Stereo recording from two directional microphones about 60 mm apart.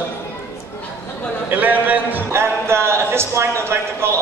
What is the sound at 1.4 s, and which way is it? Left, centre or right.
Speech, right.